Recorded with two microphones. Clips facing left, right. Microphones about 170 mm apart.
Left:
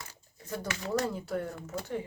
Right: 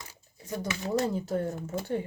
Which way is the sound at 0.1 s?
15° right (ahead or behind).